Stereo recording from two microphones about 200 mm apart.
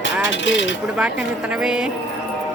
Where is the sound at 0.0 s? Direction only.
65° left (ahead or behind).